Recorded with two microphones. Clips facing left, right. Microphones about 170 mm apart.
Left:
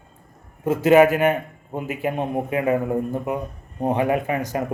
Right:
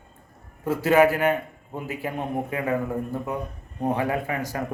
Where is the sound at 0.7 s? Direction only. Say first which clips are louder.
Left 4 dB; 20° left (ahead or behind).